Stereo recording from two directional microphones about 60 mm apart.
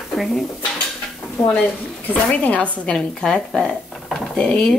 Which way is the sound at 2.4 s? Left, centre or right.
Left.